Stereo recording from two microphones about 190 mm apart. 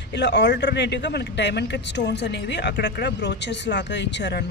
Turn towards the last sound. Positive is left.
turn(degrees=65)  # may be behind; listen again after turning